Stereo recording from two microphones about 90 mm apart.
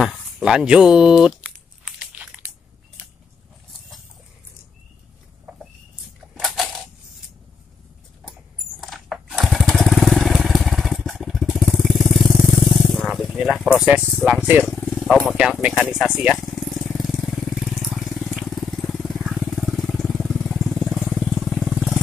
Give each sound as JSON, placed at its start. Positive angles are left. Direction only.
{"t": 0.0, "sound": "speech", "side_deg": -5}
{"t": 2.0, "sound": "crunch", "side_deg": -15}
{"t": 5.5, "sound": "a sound", "side_deg": 0}
{"t": 8.8, "sound": "motorcycle", "side_deg": 0}
{"t": 13.7, "sound": "speech", "side_deg": -15}
{"t": 15.0, "sound": "vehicle", "side_deg": 5}
{"t": 15.3, "sound": "speech", "side_deg": -10}
{"t": 16.3, "sound": "vehicle", "side_deg": 0}